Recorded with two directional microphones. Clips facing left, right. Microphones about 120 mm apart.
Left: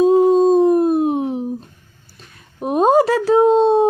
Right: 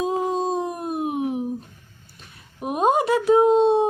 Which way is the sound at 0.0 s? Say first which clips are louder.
Left 11 dB; 35° left (ahead or behind).